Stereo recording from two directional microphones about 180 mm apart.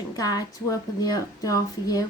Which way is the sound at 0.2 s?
20° left (ahead or behind).